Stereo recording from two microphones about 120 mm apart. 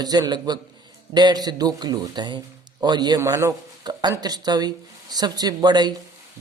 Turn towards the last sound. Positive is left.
turn(degrees=-35)  # may be behind; listen again after turning